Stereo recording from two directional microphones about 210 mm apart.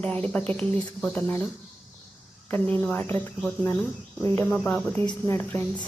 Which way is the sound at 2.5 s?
10° left (ahead or behind).